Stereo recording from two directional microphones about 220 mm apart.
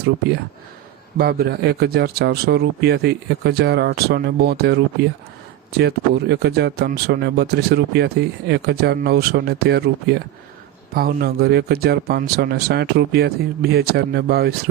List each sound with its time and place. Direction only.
1.2 s speech: 45° right (ahead or behind)